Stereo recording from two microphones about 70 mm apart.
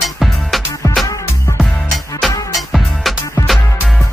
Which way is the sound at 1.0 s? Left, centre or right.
Left.